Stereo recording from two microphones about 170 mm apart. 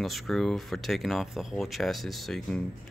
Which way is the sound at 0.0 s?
Centre (ahead or behind).